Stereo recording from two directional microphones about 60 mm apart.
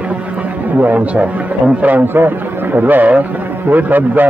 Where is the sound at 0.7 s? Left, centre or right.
Right.